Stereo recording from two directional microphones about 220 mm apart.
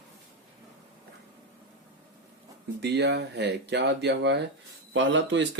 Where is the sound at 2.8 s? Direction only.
50° right (ahead or behind).